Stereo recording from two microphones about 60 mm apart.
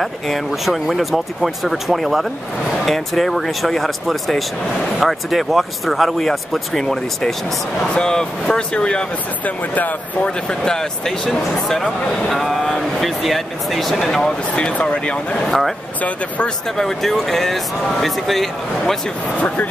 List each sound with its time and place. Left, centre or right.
0.5 s speech: centre
9.4 s speech: left
10.5 s speech: centre
14.5 s speech: centre
16.0 s speech: left
16.7 s speech: centre
19.4 s speech: left